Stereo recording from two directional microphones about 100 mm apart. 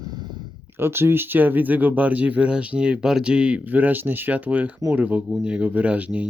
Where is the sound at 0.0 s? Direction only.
45° right (ahead or behind).